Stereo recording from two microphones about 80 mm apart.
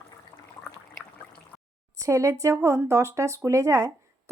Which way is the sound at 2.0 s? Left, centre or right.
Right.